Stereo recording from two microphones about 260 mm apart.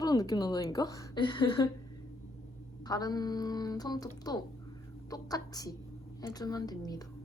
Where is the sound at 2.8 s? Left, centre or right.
Centre.